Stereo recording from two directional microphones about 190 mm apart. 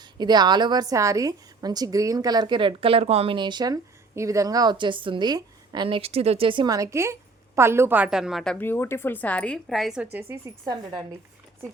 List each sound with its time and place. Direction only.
0.0 s a woman's voice: 20° right (ahead or behind)